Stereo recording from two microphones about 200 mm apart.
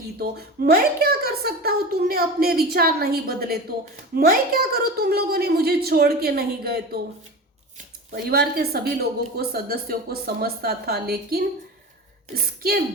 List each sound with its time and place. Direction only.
0.2 s a woman's voice: 50° right (ahead or behind)
8.1 s a woman's voice: 50° right (ahead or behind)